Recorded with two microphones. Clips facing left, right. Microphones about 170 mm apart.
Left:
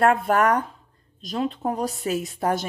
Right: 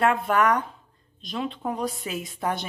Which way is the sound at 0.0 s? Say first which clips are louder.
Left 3 dB; 45° left (ahead or behind).